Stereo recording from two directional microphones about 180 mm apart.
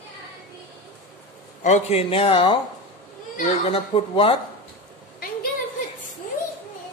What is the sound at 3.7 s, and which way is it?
Speech, 30° left (ahead or behind).